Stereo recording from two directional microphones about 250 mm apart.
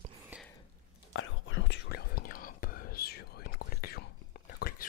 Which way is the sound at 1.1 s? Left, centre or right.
Left.